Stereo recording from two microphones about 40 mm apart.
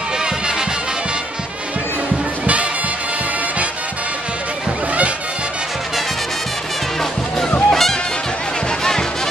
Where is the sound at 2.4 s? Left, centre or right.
Right.